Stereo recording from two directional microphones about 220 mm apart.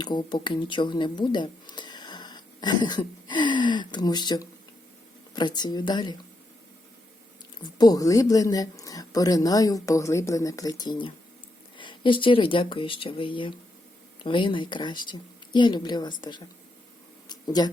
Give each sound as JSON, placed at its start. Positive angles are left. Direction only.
{"t": 0.0, "sound": "speech", "side_deg": 20}
{"t": 7.6, "sound": "speech", "side_deg": 20}
{"t": 17.2, "sound": "a sound", "side_deg": 20}